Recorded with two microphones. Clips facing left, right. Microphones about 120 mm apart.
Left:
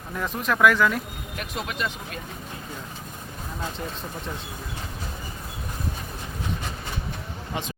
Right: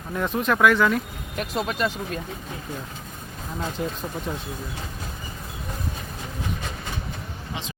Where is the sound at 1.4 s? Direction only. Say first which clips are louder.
Right 5 dB; 35° right (ahead or behind).